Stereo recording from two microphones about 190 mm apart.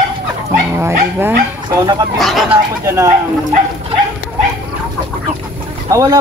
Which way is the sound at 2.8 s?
15° right (ahead or behind).